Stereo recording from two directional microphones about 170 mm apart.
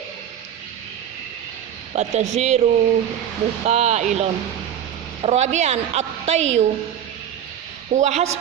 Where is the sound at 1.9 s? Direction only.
40° right (ahead or behind).